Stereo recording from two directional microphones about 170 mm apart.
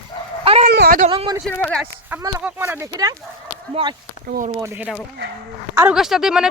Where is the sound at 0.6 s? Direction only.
65° right (ahead or behind).